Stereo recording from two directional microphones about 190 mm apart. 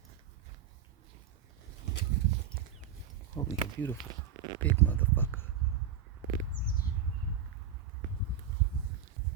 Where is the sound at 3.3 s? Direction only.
10° left (ahead or behind).